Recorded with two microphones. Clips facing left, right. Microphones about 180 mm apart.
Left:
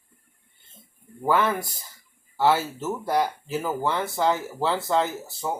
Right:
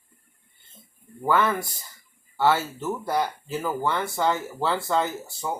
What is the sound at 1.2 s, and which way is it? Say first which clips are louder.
Speech: even; 10° left (ahead or behind).